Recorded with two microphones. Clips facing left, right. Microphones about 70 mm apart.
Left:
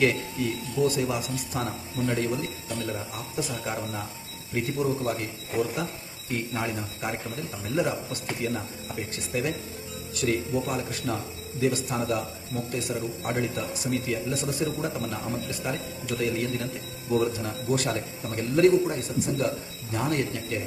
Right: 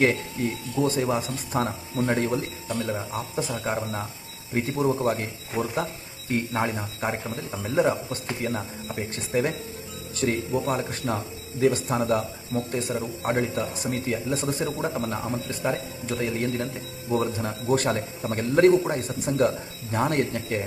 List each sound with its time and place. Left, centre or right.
0.0 s speech: right